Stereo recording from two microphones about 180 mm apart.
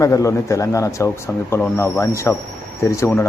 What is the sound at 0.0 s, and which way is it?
Speech, 15° left (ahead or behind).